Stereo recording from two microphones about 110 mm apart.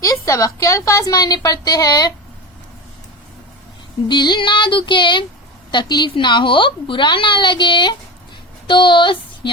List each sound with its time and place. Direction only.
0.0 s a woman's voice: 30° left (ahead or behind)
4.1 s a woman's voice: 45° left (ahead or behind)